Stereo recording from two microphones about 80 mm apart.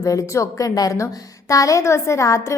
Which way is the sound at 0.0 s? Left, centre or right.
Left.